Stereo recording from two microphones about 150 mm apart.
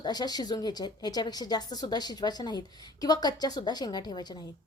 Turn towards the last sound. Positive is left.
turn(degrees=30)  # may be behind; listen again after turning